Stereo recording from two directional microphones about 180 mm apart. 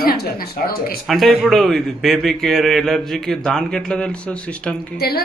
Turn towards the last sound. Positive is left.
turn(degrees=60)  # may be behind; listen again after turning